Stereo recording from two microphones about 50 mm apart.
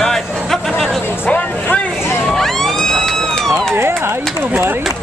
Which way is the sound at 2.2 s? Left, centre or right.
Centre.